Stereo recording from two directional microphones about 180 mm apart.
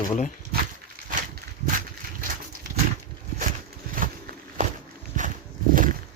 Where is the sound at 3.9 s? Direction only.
50° right (ahead or behind).